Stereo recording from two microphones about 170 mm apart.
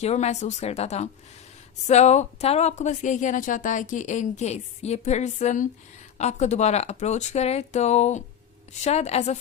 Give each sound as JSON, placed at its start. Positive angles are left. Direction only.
{"t": 0.0, "sound": "speech", "side_deg": 40}